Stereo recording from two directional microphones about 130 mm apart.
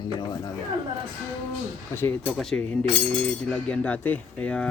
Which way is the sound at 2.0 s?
15° left (ahead or behind).